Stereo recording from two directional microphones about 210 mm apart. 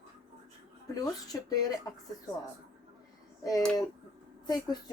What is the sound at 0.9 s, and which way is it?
Speech, 15° left (ahead or behind).